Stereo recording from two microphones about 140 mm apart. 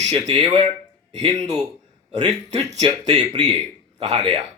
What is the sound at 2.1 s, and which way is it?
Speech, 50° right (ahead or behind).